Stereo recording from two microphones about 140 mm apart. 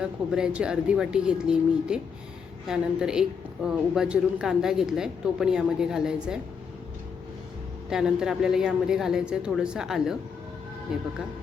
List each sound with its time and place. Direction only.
0.0 s a woman's voice: 5° right (ahead or behind)
7.9 s a woman's voice: 5° right (ahead or behind)